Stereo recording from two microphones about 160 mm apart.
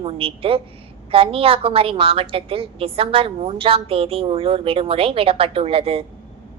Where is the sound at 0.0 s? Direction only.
35° right (ahead or behind).